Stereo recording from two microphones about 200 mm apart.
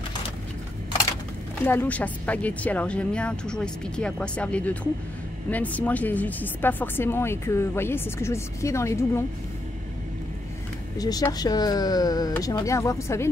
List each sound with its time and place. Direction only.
1.6 s speech: 10° left (ahead or behind)
11.0 s speech: 20° left (ahead or behind)